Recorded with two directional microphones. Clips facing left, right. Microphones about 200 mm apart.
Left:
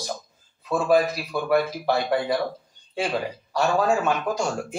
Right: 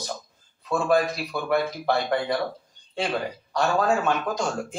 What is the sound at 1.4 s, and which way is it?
Speech, 5° left (ahead or behind).